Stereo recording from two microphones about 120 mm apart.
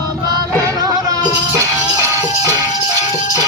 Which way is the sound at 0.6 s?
25° right (ahead or behind).